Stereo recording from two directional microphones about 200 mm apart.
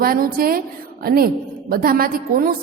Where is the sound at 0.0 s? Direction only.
45° right (ahead or behind).